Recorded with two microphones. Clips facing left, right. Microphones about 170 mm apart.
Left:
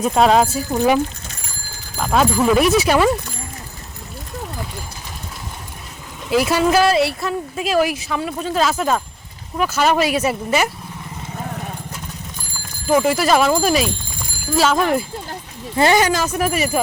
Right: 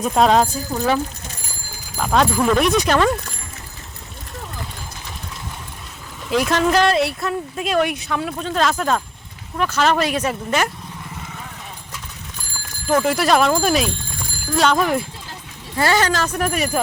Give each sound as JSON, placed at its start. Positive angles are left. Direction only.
{"t": 0.0, "sound": "speech", "side_deg": 0}
{"t": 2.0, "sound": "speech", "side_deg": 5}
{"t": 6.3, "sound": "speech", "side_deg": 5}
{"t": 11.3, "sound": "vehicle", "side_deg": 45}
{"t": 12.9, "sound": "speech", "side_deg": 5}
{"t": 15.7, "sound": "speech", "side_deg": 20}